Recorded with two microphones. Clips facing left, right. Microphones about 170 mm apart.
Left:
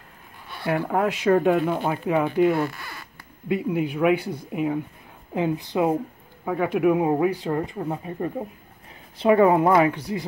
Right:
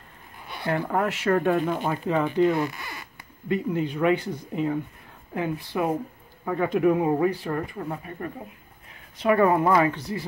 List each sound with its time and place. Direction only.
0.7 s speech: 10° left (ahead or behind)
2.6 s zipper: 15° right (ahead or behind)
3.4 s a woman's voice: 10° left (ahead or behind)
6.4 s speech: 5° left (ahead or behind)